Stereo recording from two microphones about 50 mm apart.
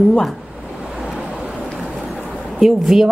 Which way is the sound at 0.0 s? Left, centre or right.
Centre.